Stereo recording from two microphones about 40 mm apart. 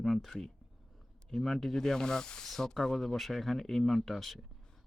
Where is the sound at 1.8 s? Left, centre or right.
Centre.